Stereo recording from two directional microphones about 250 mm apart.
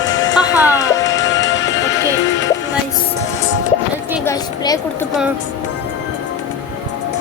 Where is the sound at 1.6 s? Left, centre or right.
Centre.